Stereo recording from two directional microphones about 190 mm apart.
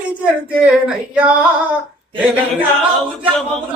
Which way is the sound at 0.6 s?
5° right (ahead or behind).